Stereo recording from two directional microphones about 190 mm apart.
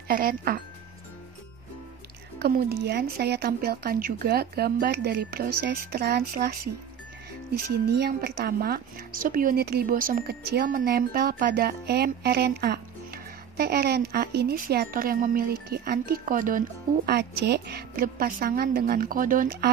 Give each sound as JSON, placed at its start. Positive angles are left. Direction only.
{"t": 0.1, "sound": "speech", "side_deg": -50}
{"t": 2.3, "sound": "speech", "side_deg": -55}
{"t": 7.5, "sound": "speech", "side_deg": -55}